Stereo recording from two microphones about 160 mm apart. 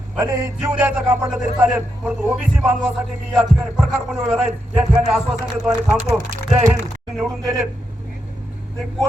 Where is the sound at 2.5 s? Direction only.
10° right (ahead or behind).